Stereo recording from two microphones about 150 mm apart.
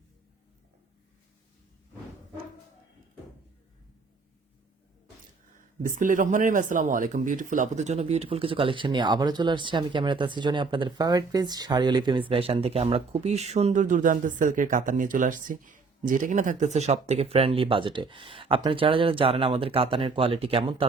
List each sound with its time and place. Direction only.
5.5 s speech: 65° right (ahead or behind); by 20.8 s 35° right (ahead or behind)